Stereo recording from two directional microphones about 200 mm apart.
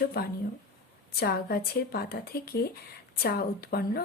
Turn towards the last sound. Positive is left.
turn(degrees=50)  # may be behind; listen again after turning